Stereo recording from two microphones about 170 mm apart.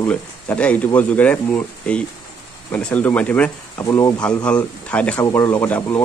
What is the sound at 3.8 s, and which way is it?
Speech, 20° left (ahead or behind).